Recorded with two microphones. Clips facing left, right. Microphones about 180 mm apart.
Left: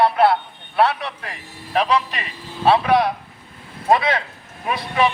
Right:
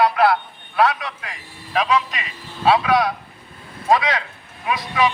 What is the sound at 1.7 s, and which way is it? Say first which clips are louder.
Speech: left 1 dB; 35° left (ahead or behind).